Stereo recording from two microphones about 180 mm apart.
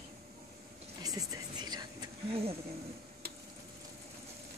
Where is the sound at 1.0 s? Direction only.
20° right (ahead or behind).